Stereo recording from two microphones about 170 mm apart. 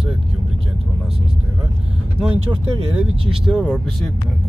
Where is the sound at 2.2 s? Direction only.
Centre (ahead or behind).